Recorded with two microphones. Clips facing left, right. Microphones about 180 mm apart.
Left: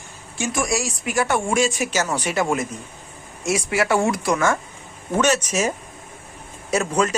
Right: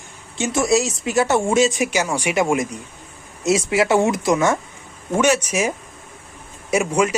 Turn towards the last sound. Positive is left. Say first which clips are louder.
# right 2 dB
turn(degrees=-10)  # may be behind; listen again after turning